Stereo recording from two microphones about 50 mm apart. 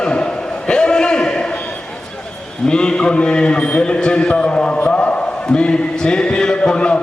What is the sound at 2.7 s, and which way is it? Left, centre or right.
A man's voice, centre.